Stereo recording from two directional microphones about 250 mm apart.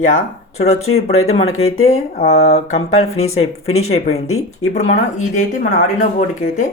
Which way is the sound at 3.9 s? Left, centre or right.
Left.